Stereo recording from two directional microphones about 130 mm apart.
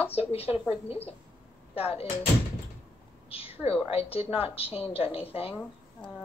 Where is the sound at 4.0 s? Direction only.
50° left (ahead or behind).